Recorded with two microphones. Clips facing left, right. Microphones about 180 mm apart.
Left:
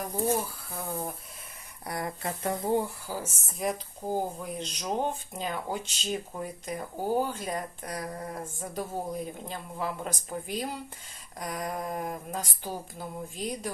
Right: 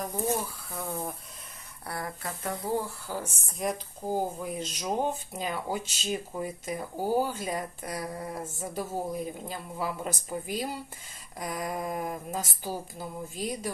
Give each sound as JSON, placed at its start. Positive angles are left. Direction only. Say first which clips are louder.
{"t": 0.7, "sound": "speech", "louder": "right 1 dB", "side_deg": 0}
{"t": 1.9, "sound": "speech", "louder": "left 3 dB", "side_deg": 20}
{"t": 3.1, "sound": "speech", "louder": "even", "side_deg": 5}